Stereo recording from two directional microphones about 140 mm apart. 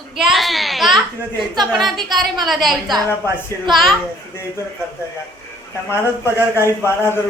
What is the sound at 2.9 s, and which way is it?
Speech, 30° right (ahead or behind).